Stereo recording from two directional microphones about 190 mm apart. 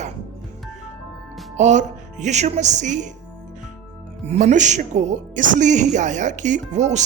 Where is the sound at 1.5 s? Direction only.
40° right (ahead or behind).